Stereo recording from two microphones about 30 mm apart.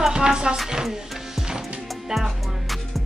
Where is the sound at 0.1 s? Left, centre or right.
Right.